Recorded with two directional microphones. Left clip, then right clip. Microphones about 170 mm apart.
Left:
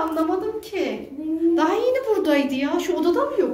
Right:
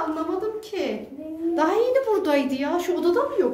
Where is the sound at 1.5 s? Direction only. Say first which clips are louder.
Right 2 dB; 50° right (ahead or behind).